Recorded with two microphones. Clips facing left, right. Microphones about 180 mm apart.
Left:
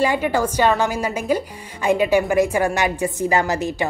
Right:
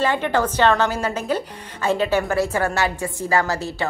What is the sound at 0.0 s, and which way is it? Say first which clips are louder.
A woman's voice: left 1 dB; 10° left (ahead or behind).